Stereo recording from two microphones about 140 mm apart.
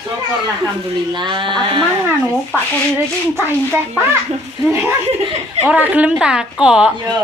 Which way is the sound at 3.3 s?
15° right (ahead or behind).